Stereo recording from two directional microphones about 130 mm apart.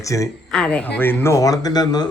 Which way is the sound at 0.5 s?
10° left (ahead or behind).